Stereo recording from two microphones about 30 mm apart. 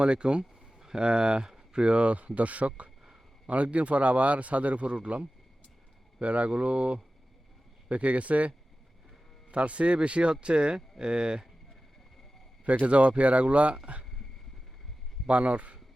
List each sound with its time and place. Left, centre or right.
0.0 s speech: right
1.8 s speech: right
12.9 s speech: right
15.3 s speech: right